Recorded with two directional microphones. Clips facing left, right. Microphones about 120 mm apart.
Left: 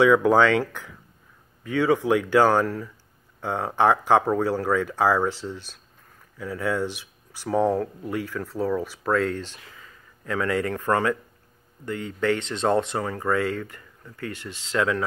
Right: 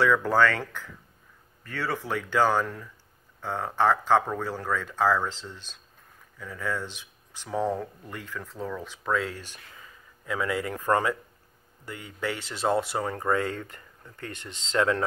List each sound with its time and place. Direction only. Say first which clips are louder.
0.0 s speech: left 5 dB; 15° left (ahead or behind)
10.2 s speech: left 4 dB; 10° right (ahead or behind)
13.0 s speech: left 2 dB; 25° right (ahead or behind)